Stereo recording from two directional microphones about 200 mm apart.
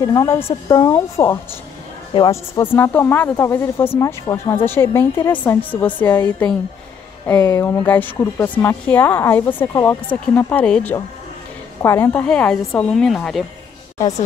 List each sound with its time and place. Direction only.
0.0 s speech: 20° left (ahead or behind)
2.6 s speech: 10° left (ahead or behind)